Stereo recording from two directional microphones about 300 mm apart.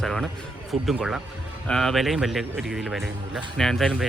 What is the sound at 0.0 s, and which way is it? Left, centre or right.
Speech, centre.